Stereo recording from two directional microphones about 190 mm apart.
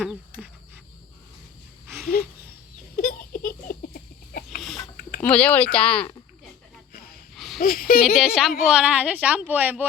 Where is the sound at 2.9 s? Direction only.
45° left (ahead or behind).